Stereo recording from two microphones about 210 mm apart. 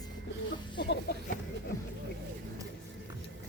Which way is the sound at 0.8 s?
55° left (ahead or behind).